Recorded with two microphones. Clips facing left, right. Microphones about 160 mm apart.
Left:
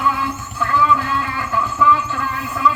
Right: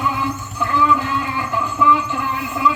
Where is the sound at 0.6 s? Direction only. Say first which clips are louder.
Even; 15° right (ahead or behind).